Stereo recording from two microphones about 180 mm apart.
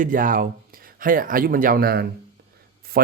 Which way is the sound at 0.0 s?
50° right (ahead or behind).